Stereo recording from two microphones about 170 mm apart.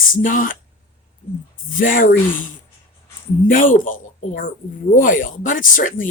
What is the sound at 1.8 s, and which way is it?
Speech, 55° left (ahead or behind).